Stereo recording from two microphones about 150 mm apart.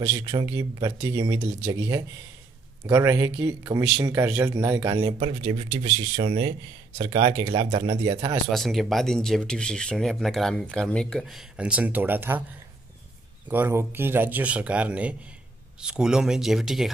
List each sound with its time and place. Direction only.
0.0 s speech: 30° right (ahead or behind)
8.5 s speech: centre (ahead or behind)
13.5 s speech: 15° right (ahead or behind)